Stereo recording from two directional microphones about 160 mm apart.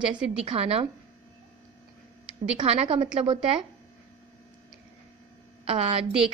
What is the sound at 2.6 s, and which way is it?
A woman's voice, 40° right (ahead or behind).